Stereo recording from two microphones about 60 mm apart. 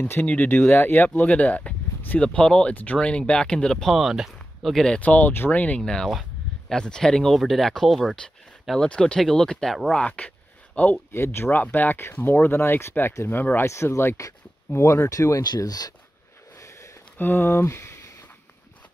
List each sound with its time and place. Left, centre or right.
0.3 s speech: left; by 4.8 s centre
5.0 s speech: left
5.8 s speech: centre
8.7 s speech: centre
9.9 s a sound: centre
11.1 s speech: left
11.6 s speech: left
13.7 s speech: left
15.0 s speech: left
16.5 s a sound: left
17.2 s speech: left